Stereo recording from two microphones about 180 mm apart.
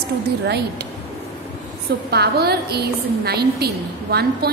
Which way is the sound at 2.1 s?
65° right (ahead or behind).